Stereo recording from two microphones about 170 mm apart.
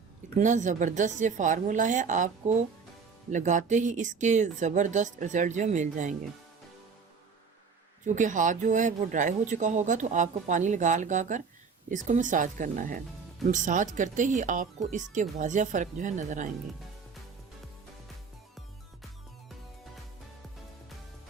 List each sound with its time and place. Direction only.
0.3 s speech: 45° right (ahead or behind)
8.0 s speech: 45° right (ahead or behind)